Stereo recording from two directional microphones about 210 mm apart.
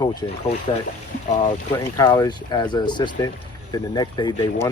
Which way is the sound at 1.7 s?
15° left (ahead or behind).